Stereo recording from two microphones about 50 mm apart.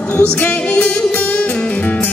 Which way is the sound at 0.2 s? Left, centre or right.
Left.